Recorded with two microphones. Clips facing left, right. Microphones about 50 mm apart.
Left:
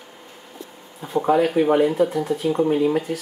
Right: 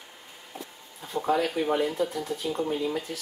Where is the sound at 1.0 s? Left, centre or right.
Centre.